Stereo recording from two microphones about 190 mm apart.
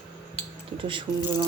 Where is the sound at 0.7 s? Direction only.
25° right (ahead or behind).